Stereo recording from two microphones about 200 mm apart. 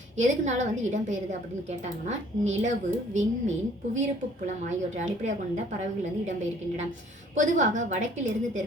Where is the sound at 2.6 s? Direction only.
40° right (ahead or behind).